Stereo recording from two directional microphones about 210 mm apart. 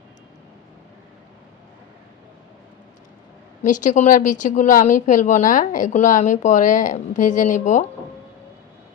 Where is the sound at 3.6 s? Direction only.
40° left (ahead or behind).